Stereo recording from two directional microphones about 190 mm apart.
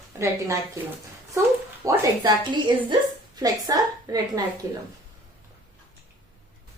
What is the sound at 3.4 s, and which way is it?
A woman's voice, 20° right (ahead or behind).